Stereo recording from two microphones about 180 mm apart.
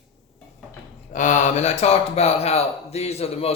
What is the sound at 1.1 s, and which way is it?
Speech, 45° left (ahead or behind).